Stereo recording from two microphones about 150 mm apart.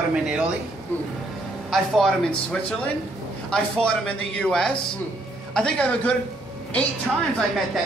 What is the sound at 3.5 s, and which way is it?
Speech, 5° left (ahead or behind).